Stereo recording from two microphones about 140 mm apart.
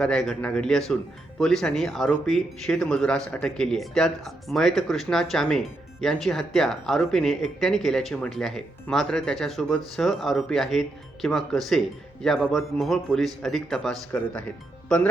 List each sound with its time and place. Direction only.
0.0 s speech: 5° left (ahead or behind)